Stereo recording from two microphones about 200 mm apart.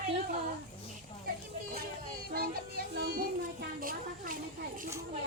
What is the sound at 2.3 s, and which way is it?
Music, 50° right (ahead or behind).